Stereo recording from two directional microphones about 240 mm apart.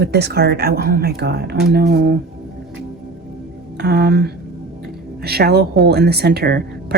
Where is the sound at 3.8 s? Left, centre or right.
Right.